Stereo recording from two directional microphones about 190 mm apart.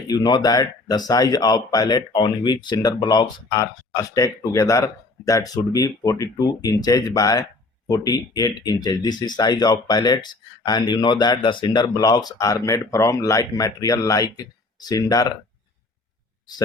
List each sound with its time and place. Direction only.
0.1 s speech: 20° left (ahead or behind)